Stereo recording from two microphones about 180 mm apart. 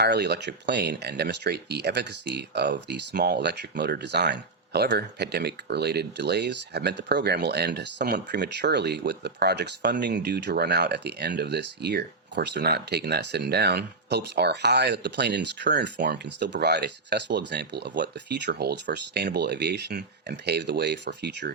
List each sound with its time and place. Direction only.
0.0 s speech: 65° right (ahead or behind)